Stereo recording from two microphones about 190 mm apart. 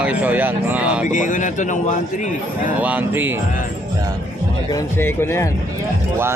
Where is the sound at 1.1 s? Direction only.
40° left (ahead or behind).